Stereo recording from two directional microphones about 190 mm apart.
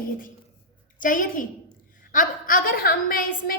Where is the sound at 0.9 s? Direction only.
45° left (ahead or behind).